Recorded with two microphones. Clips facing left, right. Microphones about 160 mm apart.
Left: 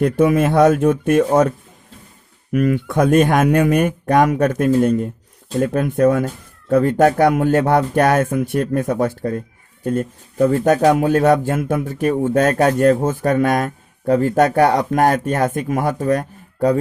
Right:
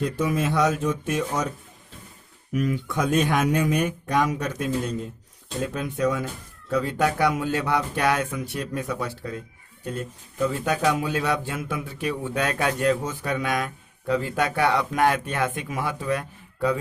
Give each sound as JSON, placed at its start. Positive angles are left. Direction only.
{"t": 0.0, "sound": "speech", "side_deg": 60}